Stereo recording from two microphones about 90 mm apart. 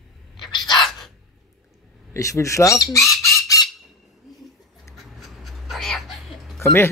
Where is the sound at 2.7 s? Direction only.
Centre (ahead or behind).